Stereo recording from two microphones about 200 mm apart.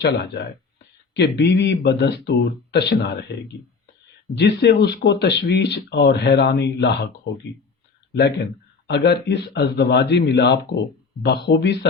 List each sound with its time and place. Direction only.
0.0 s speech: 55° left (ahead or behind)
4.4 s speech: 55° left (ahead or behind)
8.9 s speech: 55° left (ahead or behind)